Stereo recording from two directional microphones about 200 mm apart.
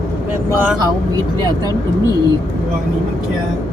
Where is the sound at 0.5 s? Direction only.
5° right (ahead or behind).